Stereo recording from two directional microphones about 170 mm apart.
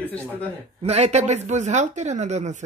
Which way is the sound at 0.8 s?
40° right (ahead or behind).